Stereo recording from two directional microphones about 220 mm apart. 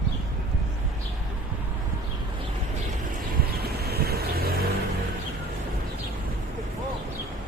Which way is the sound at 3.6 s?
45° right (ahead or behind).